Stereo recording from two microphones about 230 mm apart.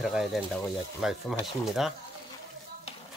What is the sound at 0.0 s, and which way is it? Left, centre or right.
Speech, centre.